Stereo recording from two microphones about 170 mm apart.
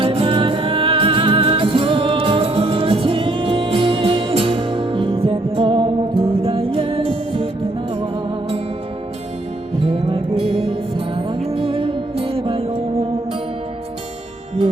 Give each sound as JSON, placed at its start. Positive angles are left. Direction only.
{"t": 0.0, "sound": "music", "side_deg": -35}
{"t": 9.9, "sound": "music", "side_deg": -30}
{"t": 11.4, "sound": "music", "side_deg": -30}